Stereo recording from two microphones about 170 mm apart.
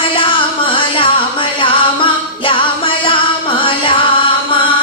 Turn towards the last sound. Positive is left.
turn(degrees=30)  # may be behind; listen again after turning